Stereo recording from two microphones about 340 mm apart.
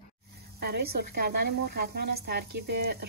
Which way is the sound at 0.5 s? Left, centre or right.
Right.